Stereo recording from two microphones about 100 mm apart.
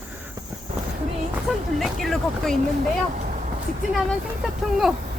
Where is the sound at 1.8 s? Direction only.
Centre (ahead or behind).